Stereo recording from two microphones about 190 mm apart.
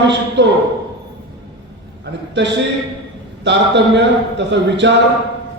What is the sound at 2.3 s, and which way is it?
A man's voice, 65° right (ahead or behind).